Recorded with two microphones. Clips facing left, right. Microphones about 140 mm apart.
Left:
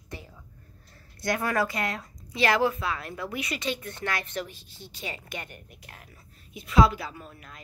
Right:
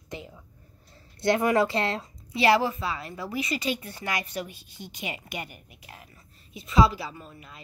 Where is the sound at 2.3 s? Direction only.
5° right (ahead or behind).